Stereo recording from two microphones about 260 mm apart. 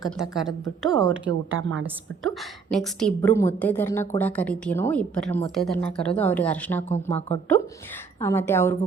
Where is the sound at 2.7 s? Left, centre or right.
Centre.